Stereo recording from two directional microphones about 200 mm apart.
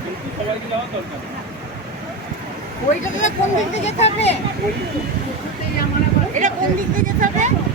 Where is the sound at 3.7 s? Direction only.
35° left (ahead or behind).